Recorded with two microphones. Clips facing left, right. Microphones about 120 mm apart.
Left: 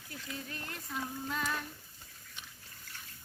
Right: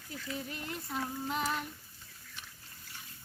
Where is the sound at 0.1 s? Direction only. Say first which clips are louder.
Right 3 dB; 20° right (ahead or behind).